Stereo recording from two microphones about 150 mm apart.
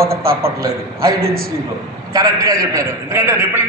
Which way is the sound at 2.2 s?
25° right (ahead or behind).